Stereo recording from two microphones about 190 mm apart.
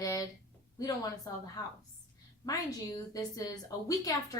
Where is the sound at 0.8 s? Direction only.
20° left (ahead or behind).